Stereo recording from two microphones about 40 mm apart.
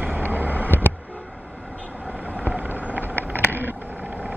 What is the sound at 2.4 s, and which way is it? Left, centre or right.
Vehicle, right.